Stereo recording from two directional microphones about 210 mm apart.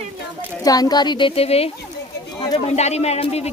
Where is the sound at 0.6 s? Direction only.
20° left (ahead or behind).